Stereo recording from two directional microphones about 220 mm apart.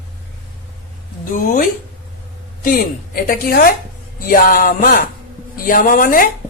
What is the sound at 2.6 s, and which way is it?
A woman's voice, 40° left (ahead or behind).